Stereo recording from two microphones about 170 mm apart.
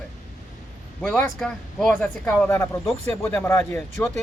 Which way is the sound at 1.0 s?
5° left (ahead or behind).